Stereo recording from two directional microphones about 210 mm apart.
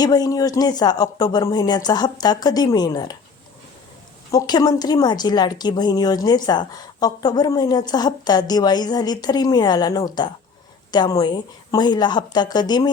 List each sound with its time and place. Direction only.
0.0 s a woman's voice: 20° left (ahead or behind)
4.3 s a woman's voice: 20° left (ahead or behind)